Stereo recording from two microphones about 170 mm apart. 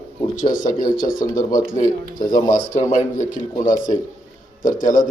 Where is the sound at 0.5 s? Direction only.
55° left (ahead or behind).